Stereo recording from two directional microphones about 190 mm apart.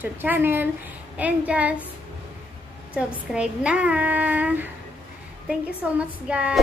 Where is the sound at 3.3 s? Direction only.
5° right (ahead or behind).